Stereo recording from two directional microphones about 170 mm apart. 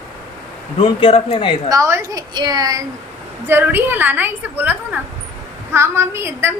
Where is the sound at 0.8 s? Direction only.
30° left (ahead or behind).